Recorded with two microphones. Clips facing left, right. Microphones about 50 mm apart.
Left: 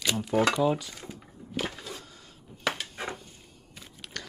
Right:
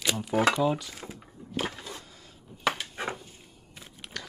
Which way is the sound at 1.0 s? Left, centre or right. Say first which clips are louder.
Even; centre.